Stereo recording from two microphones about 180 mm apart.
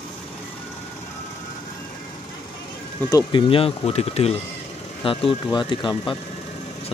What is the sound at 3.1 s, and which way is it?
Speech, 25° left (ahead or behind).